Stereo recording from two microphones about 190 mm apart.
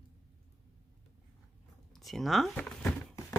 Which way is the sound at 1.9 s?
Centre (ahead or behind).